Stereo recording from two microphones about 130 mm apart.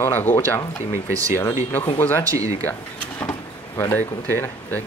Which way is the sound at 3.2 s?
20° left (ahead or behind).